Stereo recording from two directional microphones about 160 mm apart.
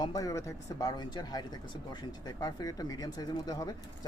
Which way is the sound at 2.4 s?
25° left (ahead or behind).